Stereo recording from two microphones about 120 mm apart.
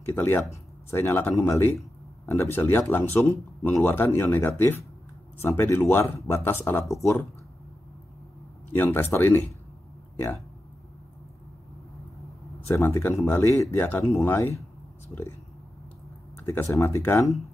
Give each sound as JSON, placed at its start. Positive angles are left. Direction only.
{"t": 0.1, "sound": "speech", "side_deg": 20}
{"t": 8.7, "sound": "speech", "side_deg": 15}
{"t": 12.5, "sound": "speech", "side_deg": 20}
{"t": 16.3, "sound": "speech", "side_deg": 20}